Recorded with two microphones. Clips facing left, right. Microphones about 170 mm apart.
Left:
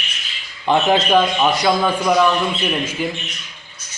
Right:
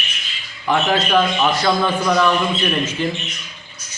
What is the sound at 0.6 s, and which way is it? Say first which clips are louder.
A man's voice: left 3 dB; 20° left (ahead or behind).